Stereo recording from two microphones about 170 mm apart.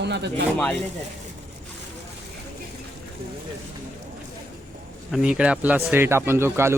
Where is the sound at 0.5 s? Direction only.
5° left (ahead or behind).